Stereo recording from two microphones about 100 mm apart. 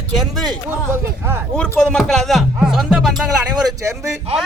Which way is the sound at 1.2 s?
25° right (ahead or behind).